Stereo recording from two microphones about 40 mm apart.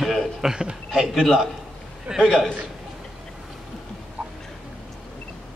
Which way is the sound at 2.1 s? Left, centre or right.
Centre.